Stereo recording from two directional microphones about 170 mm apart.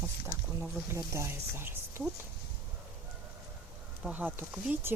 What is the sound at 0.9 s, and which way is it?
Speech, 15° right (ahead or behind).